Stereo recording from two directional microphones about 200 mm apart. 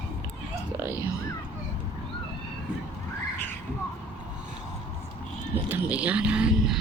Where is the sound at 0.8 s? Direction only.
10° right (ahead or behind).